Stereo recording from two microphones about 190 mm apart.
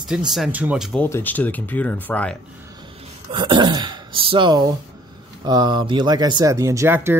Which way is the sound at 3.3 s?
25° right (ahead or behind).